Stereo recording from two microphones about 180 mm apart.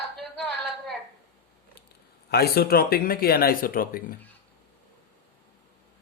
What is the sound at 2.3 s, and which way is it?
Speech, 60° left (ahead or behind).